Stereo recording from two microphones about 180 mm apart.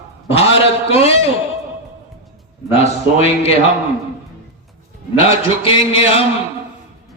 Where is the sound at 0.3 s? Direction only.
35° left (ahead or behind).